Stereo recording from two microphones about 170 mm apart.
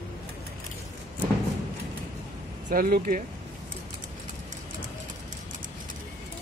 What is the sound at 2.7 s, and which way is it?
Speech, 55° right (ahead or behind).